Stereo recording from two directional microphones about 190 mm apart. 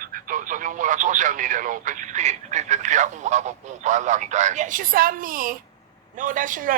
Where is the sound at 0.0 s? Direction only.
45° right (ahead or behind).